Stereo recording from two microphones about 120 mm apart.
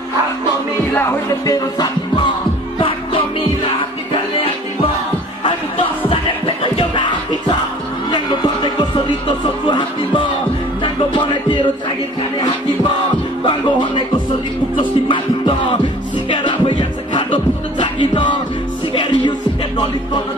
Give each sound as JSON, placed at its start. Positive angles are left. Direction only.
{"t": 0.9, "sound": "music", "side_deg": 25}
{"t": 2.8, "sound": "music", "side_deg": 45}
{"t": 5.4, "sound": "music", "side_deg": 45}
{"t": 13.5, "sound": "music", "side_deg": 40}